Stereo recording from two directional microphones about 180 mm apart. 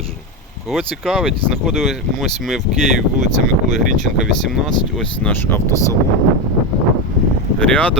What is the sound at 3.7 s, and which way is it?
Speech, centre (ahead or behind).